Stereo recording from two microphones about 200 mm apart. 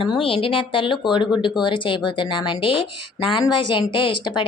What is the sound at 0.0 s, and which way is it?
A woman's voice, 25° left (ahead or behind).